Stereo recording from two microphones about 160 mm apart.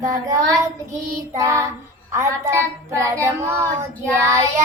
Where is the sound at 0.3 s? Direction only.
20° right (ahead or behind).